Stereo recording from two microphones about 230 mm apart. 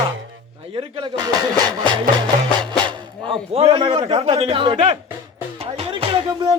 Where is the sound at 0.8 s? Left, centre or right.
Right.